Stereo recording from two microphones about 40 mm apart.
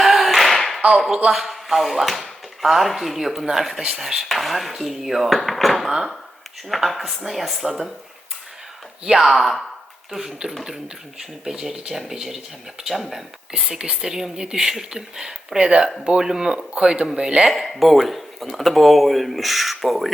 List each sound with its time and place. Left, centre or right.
0.0 s a sound: centre
0.9 s speech: centre
7.6 s speech: centre
9.1 s speech: centre
10.1 s speech: centre
13.5 s speech: centre
17.4 s speech: centre